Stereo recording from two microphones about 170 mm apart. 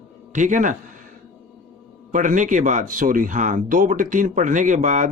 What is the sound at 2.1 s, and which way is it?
Speech, 50° right (ahead or behind).